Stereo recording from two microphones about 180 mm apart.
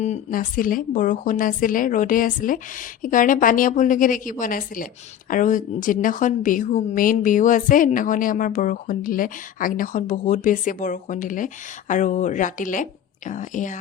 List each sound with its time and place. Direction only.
0.0 s a woman's voice: 45° left (ahead or behind)